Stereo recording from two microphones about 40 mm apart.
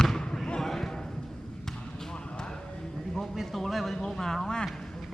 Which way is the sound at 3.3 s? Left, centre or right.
Centre.